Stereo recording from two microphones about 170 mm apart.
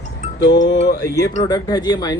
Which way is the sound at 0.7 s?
85° left.